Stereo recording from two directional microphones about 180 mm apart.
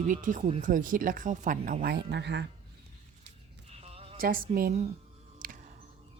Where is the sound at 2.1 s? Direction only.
75° right (ahead or behind).